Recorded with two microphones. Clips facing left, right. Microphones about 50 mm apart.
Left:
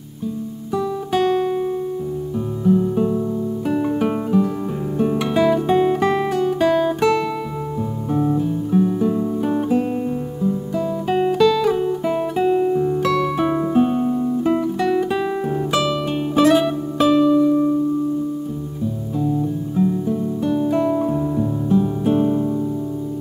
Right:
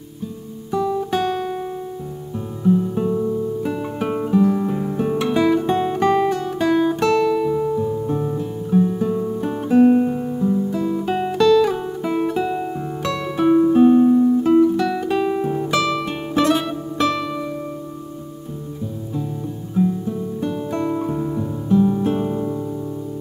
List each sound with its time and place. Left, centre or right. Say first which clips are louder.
0.7 s guitar: right 1 dB; centre
2.6 s music: left 1 dB; centre
5.3 s guitar: left 1 dB; centre
7.5 s music: right 5 dB; centre
9.8 s guitar: right 7 dB; centre
12.6 s music: left 7 dB; centre
14.0 s guitar: right 4 dB; centre
19.1 s guitar: left 8 dB; centre
21.6 s music: right 3 dB; centre